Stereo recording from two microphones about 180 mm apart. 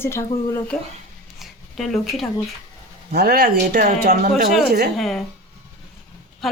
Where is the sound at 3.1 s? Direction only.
60° right (ahead or behind).